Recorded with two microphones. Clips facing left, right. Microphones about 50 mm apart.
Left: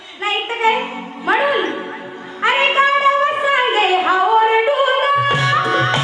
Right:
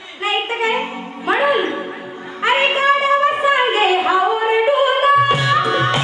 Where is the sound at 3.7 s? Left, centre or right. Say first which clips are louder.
Even; right.